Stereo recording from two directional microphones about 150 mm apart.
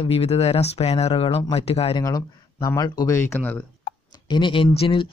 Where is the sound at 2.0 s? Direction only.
25° left (ahead or behind).